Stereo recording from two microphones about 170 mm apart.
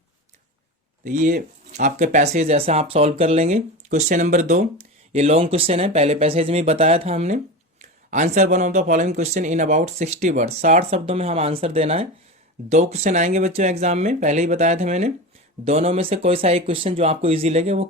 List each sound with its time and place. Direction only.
1.0 s speech: 50° right (ahead or behind)